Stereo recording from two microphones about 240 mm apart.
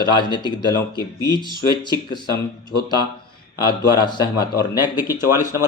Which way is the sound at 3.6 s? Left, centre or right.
Centre.